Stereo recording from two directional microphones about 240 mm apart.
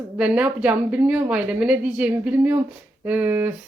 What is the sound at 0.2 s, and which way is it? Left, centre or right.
Speech, centre.